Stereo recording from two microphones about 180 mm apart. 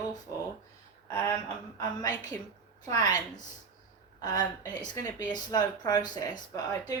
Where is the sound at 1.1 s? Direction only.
15° left (ahead or behind).